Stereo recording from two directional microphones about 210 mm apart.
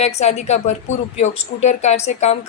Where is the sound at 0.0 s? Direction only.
30° left (ahead or behind).